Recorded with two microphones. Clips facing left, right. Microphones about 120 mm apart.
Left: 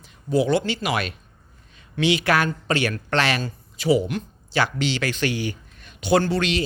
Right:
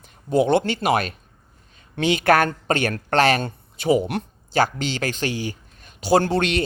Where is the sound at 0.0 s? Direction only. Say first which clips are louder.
Right 2 dB; 50° right (ahead or behind).